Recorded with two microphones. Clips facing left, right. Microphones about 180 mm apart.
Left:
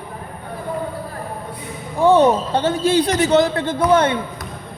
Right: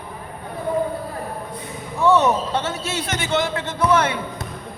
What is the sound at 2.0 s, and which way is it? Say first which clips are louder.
A man's voice: left 4 dB; 30° left (ahead or behind).